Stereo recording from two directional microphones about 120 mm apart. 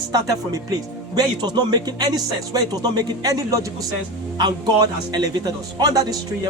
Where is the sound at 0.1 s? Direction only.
30° right (ahead or behind).